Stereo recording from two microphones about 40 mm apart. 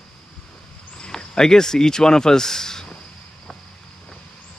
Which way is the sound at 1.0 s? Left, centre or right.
Centre.